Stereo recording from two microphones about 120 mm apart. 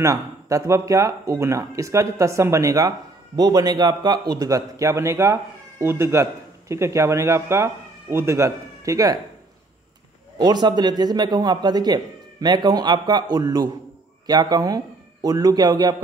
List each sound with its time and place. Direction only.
0.0 s a man's voice: 25° right (ahead or behind)
10.4 s speech: 35° right (ahead or behind)